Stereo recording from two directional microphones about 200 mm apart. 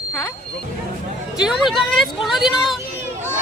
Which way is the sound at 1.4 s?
Centre (ahead or behind).